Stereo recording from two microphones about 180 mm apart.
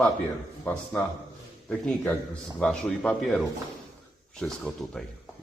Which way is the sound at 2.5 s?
5° left (ahead or behind).